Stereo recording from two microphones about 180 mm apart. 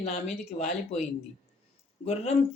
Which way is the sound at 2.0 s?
35° left (ahead or behind).